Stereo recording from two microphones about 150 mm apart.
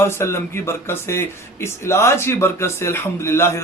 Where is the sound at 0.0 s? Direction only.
15° left (ahead or behind).